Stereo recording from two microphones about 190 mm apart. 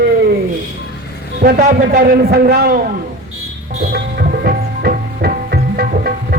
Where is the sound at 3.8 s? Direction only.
50° right (ahead or behind).